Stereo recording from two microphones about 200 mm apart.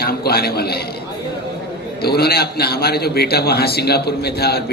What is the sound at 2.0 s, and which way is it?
A man's voice, 50° left (ahead or behind).